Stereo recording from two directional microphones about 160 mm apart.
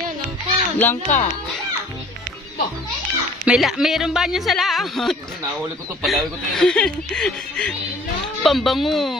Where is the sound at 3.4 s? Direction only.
5° right (ahead or behind).